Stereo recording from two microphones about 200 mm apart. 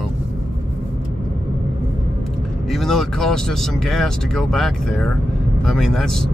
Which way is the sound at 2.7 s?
Centre (ahead or behind).